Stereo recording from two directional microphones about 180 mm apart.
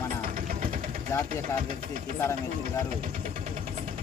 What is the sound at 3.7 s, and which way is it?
Vehicle, 45° right (ahead or behind).